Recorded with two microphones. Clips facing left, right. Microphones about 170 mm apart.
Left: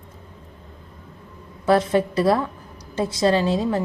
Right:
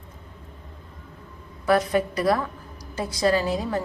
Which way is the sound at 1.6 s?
25° left (ahead or behind).